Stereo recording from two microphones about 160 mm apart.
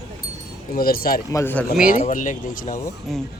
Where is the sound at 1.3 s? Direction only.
15° left (ahead or behind).